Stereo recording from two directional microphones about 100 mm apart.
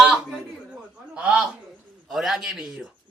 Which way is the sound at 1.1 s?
10° right (ahead or behind).